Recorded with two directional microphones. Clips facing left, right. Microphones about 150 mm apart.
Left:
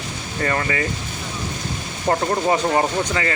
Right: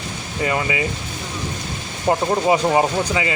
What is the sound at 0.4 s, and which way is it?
Speech, 10° right (ahead or behind).